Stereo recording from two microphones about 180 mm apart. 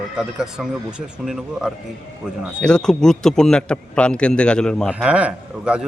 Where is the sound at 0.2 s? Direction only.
5° right (ahead or behind).